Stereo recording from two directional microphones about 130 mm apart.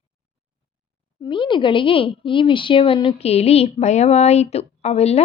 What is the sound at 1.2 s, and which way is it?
A woman's voice, 40° left (ahead or behind).